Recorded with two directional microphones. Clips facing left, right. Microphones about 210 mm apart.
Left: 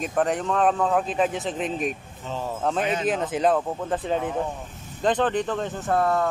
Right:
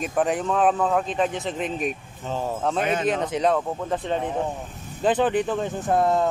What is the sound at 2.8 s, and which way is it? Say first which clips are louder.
Speech: right 2 dB; 55° right (ahead or behind).